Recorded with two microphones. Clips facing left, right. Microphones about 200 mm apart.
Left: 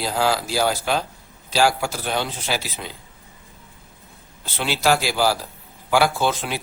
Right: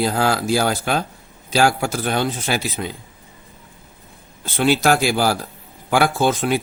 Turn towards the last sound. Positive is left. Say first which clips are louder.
# right 5 dB
turn(degrees=-50)  # may be behind; listen again after turning